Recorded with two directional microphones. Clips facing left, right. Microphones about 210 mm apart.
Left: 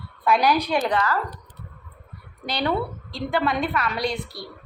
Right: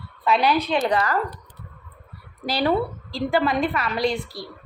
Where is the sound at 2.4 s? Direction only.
5° right (ahead or behind).